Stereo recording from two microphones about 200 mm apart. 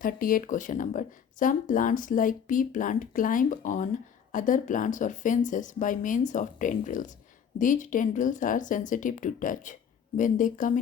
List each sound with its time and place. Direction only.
0.0 s speech: 45° left (ahead or behind)